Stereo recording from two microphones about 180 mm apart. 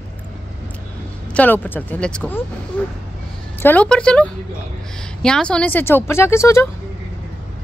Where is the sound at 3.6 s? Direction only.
10° left (ahead or behind).